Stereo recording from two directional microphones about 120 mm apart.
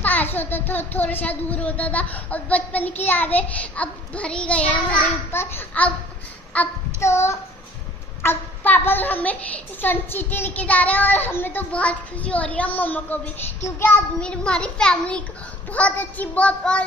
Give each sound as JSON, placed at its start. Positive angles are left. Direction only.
{"t": 0.0, "sound": "a child's voice", "side_deg": 15}
{"t": 7.0, "sound": "child singing", "side_deg": 25}
{"t": 8.2, "sound": "a child's voice", "side_deg": 15}